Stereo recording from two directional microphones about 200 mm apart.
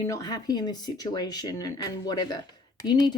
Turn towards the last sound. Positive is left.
turn(degrees=20)  # may be behind; listen again after turning